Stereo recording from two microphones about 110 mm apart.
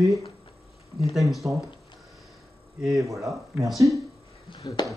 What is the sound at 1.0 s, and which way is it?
Speech, centre (ahead or behind).